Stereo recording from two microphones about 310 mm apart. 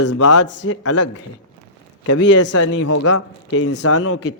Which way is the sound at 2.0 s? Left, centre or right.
Left.